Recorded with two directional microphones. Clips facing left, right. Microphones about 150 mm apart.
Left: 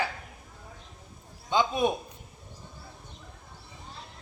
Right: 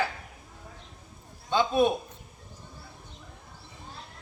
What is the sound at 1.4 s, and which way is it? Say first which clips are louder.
Speech: right 2 dB; 15° left (ahead or behind).